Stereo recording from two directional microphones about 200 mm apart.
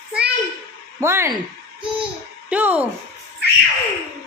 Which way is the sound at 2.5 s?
5° right (ahead or behind).